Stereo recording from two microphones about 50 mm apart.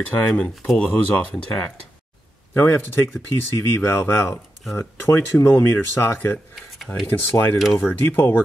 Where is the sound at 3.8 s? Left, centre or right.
Left.